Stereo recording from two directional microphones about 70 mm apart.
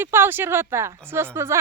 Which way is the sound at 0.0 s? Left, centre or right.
Right.